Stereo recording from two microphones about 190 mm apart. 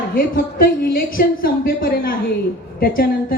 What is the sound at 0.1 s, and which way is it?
A woman's voice, 50° left (ahead or behind).